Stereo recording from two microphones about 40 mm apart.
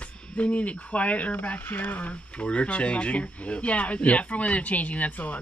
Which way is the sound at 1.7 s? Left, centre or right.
Left.